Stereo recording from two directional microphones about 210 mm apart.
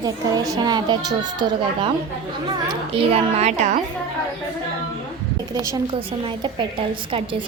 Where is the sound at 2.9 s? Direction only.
30° right (ahead or behind).